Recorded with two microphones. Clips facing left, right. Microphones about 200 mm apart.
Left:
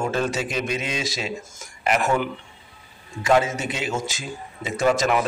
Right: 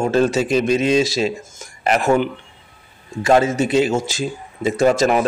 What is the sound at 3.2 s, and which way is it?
A man's voice, 35° right (ahead or behind).